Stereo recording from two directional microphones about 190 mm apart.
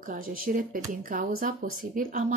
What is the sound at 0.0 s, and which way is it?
Speech, 45° right (ahead or behind).